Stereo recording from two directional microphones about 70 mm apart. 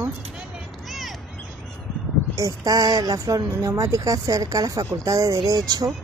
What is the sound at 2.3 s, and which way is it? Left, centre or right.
Speech, right.